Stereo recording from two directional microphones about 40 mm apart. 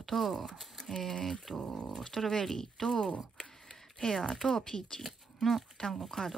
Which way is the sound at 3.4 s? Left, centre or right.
Centre.